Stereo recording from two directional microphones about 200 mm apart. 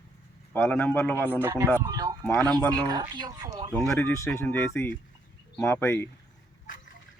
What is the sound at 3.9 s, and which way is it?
Speech, 15° left (ahead or behind).